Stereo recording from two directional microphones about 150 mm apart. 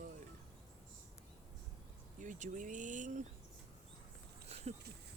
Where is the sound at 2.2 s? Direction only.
60° right (ahead or behind).